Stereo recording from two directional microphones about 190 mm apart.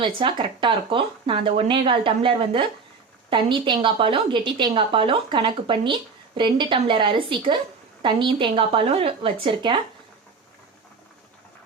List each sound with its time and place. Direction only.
0.0 s a woman's voice: 25° right (ahead or behind)